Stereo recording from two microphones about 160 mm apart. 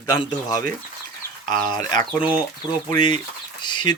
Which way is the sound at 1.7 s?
25° left (ahead or behind).